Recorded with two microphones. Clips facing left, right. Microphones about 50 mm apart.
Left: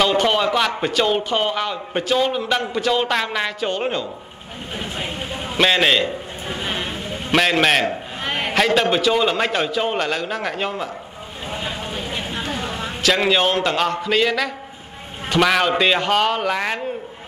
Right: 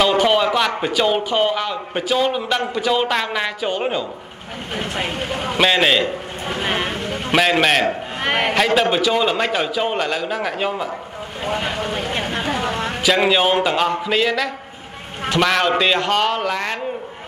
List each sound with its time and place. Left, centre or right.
0.0 s speech: centre
4.7 s vehicle: right
5.6 s speech: centre
6.5 s music: right
7.8 s a man's voice: right
8.5 s speech: centre
11.4 s a sound: right
12.6 s vehicle: right
13.0 s a man's voice: centre